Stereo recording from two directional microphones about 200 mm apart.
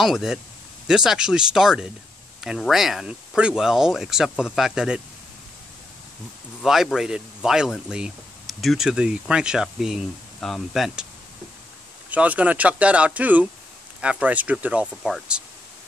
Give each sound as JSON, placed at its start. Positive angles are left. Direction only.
{"t": 0.0, "sound": "speech", "side_deg": 0}
{"t": 6.6, "sound": "speech", "side_deg": 0}
{"t": 12.1, "sound": "speech", "side_deg": -5}